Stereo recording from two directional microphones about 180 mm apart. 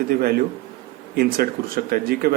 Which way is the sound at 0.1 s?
60° right (ahead or behind).